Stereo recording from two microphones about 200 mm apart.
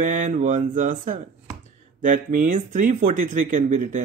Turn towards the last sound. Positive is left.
turn(degrees=-40)  # may be behind; listen again after turning